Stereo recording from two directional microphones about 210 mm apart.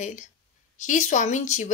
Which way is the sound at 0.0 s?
35° left (ahead or behind).